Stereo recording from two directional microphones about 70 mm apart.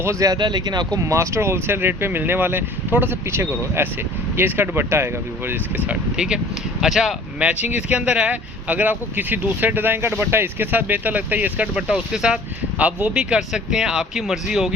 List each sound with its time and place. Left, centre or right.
0.2 s speech: right
0.9 s speech: right
6.1 s speech: centre
7.3 s speech: centre